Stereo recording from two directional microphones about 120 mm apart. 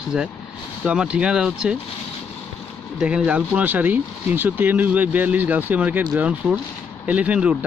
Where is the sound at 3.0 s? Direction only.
10° right (ahead or behind).